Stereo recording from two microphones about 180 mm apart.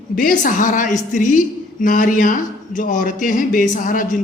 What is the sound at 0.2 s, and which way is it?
A man's voice, 50° left (ahead or behind).